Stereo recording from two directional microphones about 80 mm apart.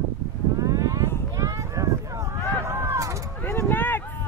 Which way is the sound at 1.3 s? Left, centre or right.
Right.